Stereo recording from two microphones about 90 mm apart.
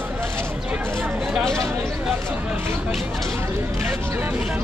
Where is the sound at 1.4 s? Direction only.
5° left (ahead or behind).